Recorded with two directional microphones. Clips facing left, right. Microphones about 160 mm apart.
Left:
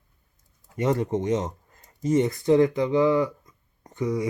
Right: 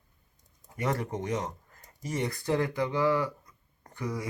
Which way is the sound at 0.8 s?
25° left (ahead or behind).